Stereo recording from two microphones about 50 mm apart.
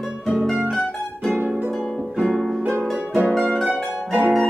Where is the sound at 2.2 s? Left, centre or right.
Centre.